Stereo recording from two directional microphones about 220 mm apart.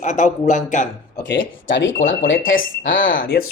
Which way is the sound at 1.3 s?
55° left (ahead or behind).